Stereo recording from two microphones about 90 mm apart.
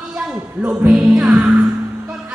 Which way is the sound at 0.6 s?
15° right (ahead or behind).